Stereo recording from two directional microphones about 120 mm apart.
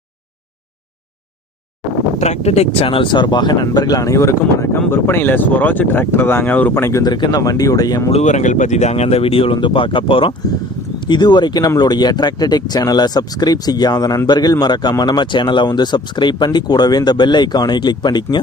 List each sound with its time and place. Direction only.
2.1 s speech: 70° left (ahead or behind); by 7.0 s 20° left (ahead or behind)
7.0 s speech: 35° left (ahead or behind)
8.1 s speech: 80° left; by 18.3 s 35° left (ahead or behind)